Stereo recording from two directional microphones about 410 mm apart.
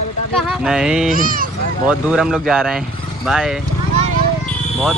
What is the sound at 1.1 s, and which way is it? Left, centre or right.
Speech, centre.